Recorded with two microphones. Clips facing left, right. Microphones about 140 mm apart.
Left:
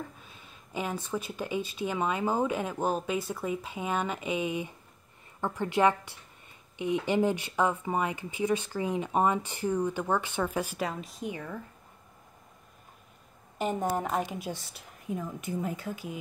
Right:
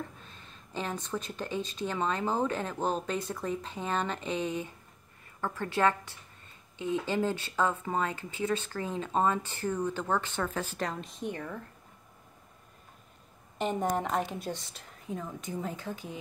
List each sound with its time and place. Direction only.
0.2 s speech: 10° left (ahead or behind)
13.6 s speech: 5° left (ahead or behind)